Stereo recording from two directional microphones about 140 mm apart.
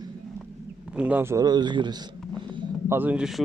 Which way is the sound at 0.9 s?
10° right (ahead or behind).